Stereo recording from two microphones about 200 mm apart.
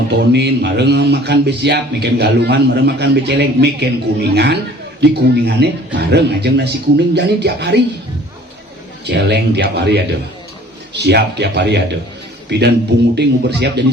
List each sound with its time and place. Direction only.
0.2 s speech: 55° right (ahead or behind)
9.0 s a man's voice: 60° right (ahead or behind)